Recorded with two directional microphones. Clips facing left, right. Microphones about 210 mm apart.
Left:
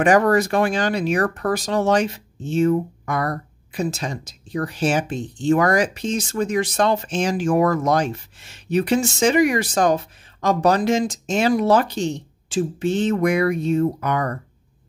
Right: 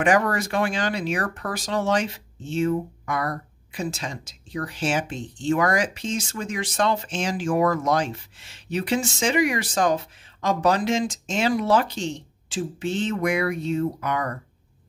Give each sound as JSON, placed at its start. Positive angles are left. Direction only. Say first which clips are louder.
{"t": 0.0, "sound": "speech", "louder": "left 5 dB", "side_deg": 40}